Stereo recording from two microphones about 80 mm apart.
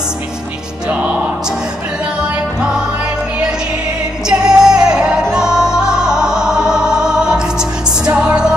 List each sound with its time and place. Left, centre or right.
0.8 s music: centre
4.3 s music: centre